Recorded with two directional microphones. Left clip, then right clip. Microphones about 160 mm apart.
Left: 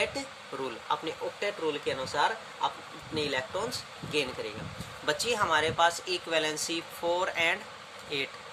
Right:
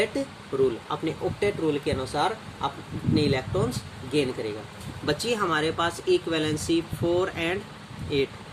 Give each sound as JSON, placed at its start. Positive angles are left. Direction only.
{"t": 0.0, "sound": "speech", "side_deg": 20}